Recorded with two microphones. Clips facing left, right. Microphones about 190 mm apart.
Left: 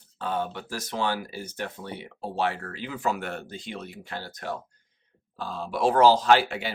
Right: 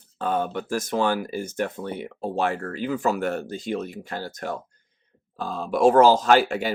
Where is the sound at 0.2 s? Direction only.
50° right (ahead or behind).